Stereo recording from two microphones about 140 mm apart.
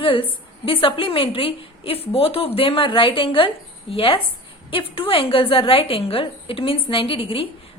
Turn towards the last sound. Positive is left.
turn(degrees=40)  # may be behind; listen again after turning